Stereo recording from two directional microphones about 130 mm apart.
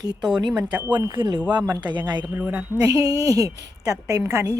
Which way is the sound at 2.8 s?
25° right (ahead or behind).